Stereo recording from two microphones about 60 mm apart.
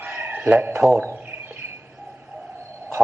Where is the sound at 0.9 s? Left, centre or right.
Right.